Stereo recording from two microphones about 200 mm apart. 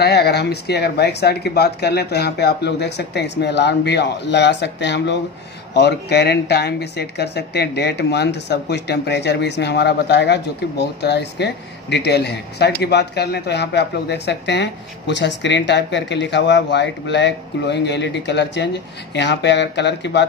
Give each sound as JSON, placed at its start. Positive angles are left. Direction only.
{"t": 0.0, "sound": "speech", "side_deg": 55}